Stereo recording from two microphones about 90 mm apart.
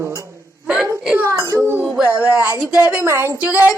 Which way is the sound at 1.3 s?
35° right (ahead or behind).